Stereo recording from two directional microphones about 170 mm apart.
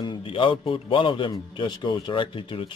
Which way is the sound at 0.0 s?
30° left (ahead or behind).